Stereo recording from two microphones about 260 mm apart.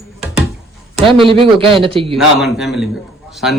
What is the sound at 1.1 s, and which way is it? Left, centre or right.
A man's voice, centre.